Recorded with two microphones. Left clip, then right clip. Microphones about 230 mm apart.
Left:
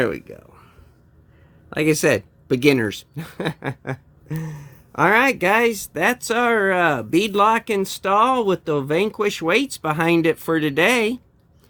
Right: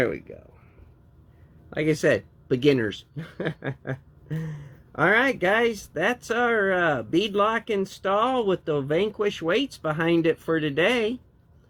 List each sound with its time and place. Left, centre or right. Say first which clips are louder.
0.0 s speech: left 3 dB; left
1.7 s speech: left 4 dB; left